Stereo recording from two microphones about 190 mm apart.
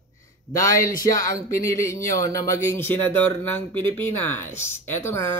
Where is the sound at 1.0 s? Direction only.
15° left (ahead or behind).